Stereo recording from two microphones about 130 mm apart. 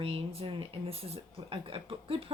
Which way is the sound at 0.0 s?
50° right (ahead or behind).